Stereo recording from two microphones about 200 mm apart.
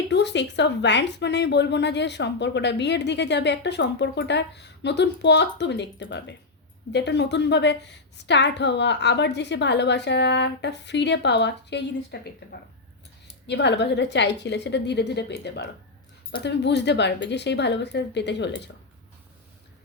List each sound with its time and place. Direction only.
0.1 s a woman's voice: 60° left (ahead or behind)
13.5 s a woman's voice: 60° left (ahead or behind)